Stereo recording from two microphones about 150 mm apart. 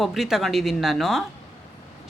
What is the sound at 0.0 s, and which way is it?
A woman's voice, centre (ahead or behind).